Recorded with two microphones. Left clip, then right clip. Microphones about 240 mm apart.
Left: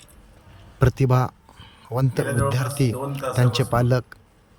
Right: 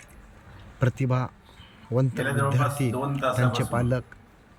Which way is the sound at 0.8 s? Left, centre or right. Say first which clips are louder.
Left 6 dB; left.